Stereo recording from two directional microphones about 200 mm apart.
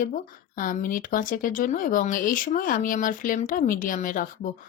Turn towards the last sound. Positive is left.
turn(degrees=40)  # may be behind; listen again after turning